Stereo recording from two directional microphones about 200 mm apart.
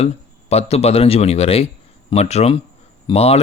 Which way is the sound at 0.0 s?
30° left (ahead or behind).